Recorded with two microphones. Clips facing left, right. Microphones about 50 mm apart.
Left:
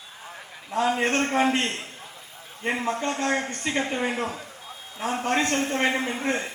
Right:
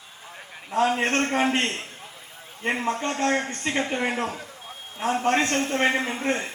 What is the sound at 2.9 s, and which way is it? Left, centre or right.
A man's voice, right.